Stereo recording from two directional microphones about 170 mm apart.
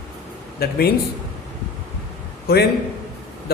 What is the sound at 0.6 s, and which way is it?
Speech, 65° left (ahead or behind).